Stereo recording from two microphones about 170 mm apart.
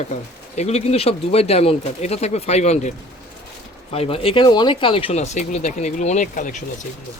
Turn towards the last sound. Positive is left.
turn(degrees=50)  # may be behind; listen again after turning